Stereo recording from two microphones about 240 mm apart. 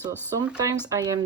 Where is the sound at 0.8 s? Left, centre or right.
Centre.